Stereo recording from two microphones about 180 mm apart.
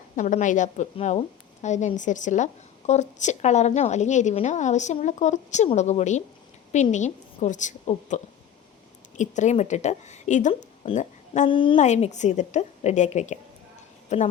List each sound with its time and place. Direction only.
0.2 s a woman's voice: 45° left (ahead or behind); by 11.8 s 30° left (ahead or behind)
11.8 s a woman's voice: 40° left (ahead or behind)